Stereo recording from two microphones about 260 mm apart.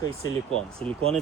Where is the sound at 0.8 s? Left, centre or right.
Centre.